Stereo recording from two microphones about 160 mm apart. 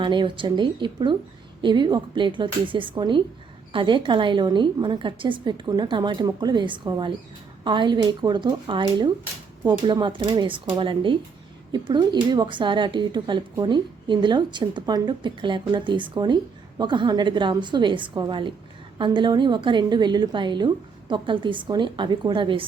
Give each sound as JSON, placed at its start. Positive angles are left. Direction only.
{"t": 0.0, "sound": "speech", "side_deg": -30}